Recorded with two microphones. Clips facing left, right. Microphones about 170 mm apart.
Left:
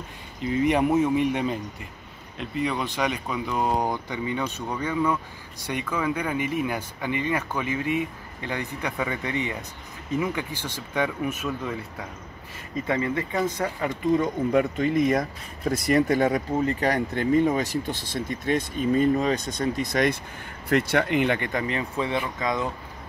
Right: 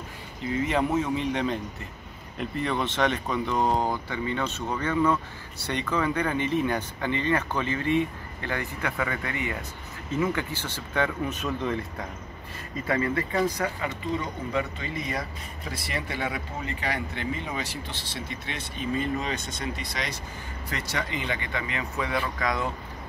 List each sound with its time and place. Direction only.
0.5 s speech: 20° left (ahead or behind)
3.7 s speech: 15° left (ahead or behind)
12.8 s speech: 20° left (ahead or behind)
13.8 s speech: 50° left (ahead or behind); by 22.7 s 20° left (ahead or behind)